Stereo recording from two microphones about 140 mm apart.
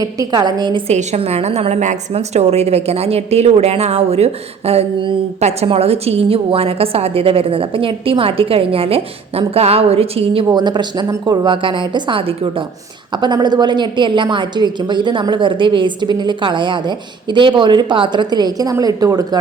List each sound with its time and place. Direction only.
0.0 s a woman's voice: 25° right (ahead or behind)
0.9 s a woman's voice: 50° right (ahead or behind)
10.5 s a woman's voice: 30° right (ahead or behind)